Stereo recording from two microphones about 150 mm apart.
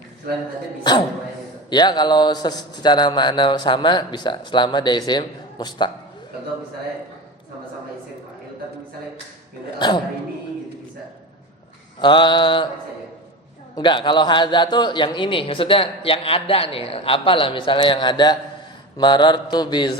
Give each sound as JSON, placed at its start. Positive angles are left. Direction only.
{"t": 0.9, "sound": "speech", "side_deg": 30}
{"t": 9.7, "sound": "speech", "side_deg": 30}
{"t": 11.9, "sound": "a man's voice", "side_deg": 30}
{"t": 13.7, "sound": "a man's voice", "side_deg": 30}